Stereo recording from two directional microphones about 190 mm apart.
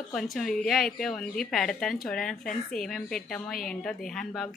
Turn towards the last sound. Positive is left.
turn(degrees=0)  # may be behind; listen again after turning